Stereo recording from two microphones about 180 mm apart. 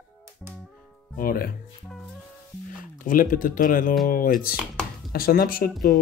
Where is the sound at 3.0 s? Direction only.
50° left (ahead or behind).